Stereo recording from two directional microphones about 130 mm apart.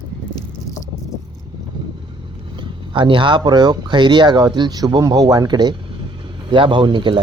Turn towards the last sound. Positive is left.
turn(degrees=-40)  # may be behind; listen again after turning